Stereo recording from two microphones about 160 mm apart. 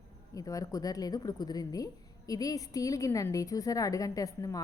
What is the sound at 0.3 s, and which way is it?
A woman's voice, 20° left (ahead or behind).